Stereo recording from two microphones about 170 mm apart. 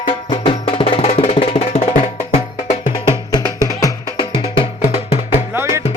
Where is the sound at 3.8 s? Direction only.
30° left (ahead or behind).